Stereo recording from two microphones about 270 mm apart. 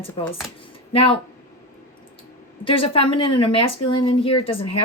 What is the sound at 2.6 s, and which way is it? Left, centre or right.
Speech, centre.